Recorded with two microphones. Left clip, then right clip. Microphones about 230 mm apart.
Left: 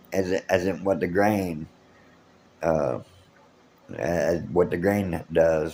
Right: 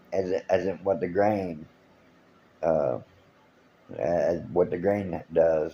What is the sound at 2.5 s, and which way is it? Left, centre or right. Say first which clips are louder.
Speech: left 1 dB; left.